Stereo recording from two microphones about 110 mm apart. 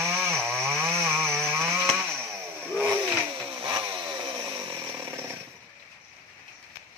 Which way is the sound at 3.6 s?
45° right (ahead or behind).